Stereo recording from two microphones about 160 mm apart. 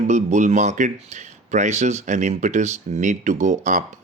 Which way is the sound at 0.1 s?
50° right (ahead or behind).